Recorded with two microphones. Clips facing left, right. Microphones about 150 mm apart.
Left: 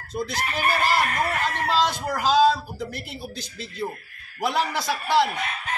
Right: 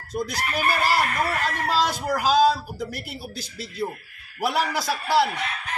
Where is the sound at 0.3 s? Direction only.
10° right (ahead or behind).